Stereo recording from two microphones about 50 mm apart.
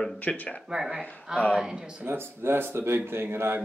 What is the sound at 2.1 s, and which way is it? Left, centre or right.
Speech, right.